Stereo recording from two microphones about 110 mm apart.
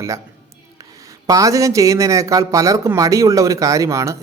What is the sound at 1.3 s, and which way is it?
Speech, 30° right (ahead or behind).